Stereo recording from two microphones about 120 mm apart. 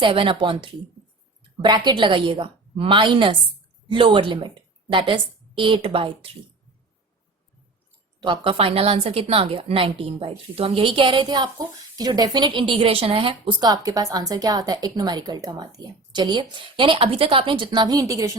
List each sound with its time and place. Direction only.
0.0 s a woman's voice: 45° right (ahead or behind)
8.2 s a woman's voice: 45° right (ahead or behind); by 18.3 s 25° right (ahead or behind)